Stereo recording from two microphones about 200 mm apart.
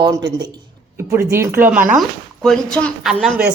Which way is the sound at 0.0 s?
20° right (ahead or behind).